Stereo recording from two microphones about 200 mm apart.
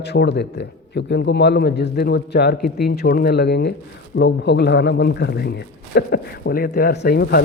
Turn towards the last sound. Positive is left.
turn(degrees=50)  # may be behind; listen again after turning